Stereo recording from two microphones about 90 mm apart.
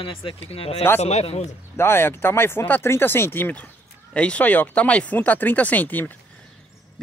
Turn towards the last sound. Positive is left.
turn(degrees=20)  # may be behind; listen again after turning